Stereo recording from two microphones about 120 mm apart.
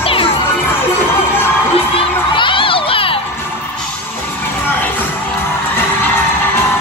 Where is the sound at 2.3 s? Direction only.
45° left (ahead or behind).